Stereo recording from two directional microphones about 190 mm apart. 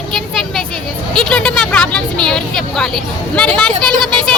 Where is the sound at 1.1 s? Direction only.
5° left (ahead or behind).